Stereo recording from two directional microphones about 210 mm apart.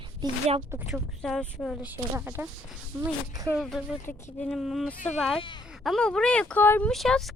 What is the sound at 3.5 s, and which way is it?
Speech, centre (ahead or behind).